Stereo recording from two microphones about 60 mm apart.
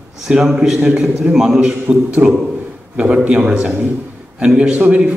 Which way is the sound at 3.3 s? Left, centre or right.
Centre.